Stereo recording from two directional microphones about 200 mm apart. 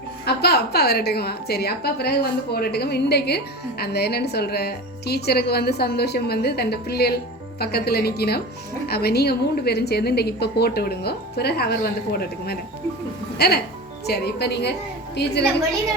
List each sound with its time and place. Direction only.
0.3 s a woman's voice: 55° left (ahead or behind)